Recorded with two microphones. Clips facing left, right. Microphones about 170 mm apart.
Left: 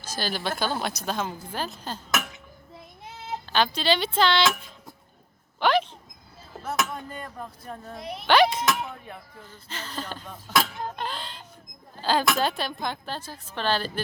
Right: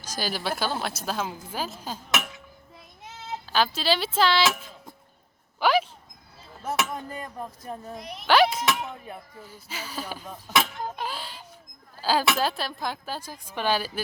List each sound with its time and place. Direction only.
0.0 s a woman's voice: 10° right (ahead or behind)
3.4 s speech: 5° right (ahead or behind)
5.5 s a sound: 10° right (ahead or behind)
6.7 s speech: 10° right (ahead or behind)